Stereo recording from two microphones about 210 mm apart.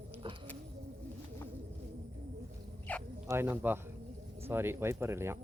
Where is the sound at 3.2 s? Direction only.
10° right (ahead or behind).